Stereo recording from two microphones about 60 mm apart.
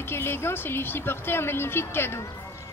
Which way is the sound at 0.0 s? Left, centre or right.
Left.